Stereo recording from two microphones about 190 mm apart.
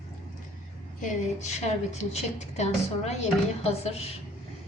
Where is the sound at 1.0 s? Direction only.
35° left (ahead or behind).